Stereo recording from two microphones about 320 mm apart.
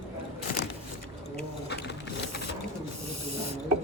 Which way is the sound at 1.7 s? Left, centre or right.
Left.